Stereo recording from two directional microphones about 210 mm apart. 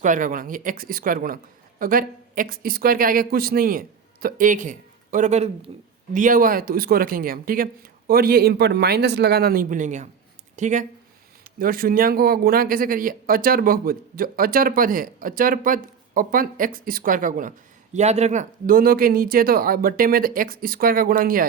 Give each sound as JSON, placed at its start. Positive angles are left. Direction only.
{"t": 0.0, "sound": "speech", "side_deg": -40}